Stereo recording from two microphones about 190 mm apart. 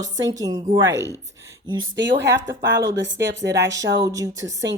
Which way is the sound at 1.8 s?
80° right.